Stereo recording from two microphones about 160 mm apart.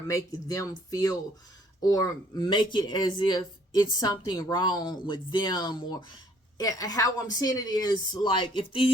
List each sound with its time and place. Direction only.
0.1 s speech: 20° left (ahead or behind)